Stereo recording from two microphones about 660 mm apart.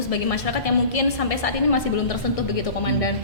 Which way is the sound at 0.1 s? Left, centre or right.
Left.